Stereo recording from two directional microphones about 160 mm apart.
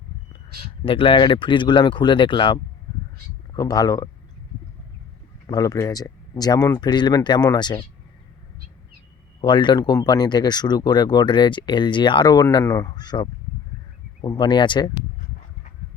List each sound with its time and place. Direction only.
0.6 s speech: 35° left (ahead or behind)
5.5 s speech: 20° left (ahead or behind)
9.4 s speech: 30° left (ahead or behind)